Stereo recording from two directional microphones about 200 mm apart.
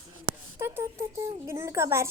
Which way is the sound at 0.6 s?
10° right (ahead or behind).